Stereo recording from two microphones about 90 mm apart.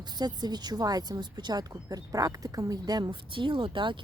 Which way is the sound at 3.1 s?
70° right (ahead or behind).